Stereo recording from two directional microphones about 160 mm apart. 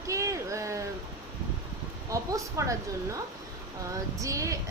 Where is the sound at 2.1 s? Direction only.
20° right (ahead or behind).